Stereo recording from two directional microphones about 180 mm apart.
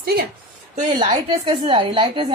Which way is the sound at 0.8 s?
30° right (ahead or behind).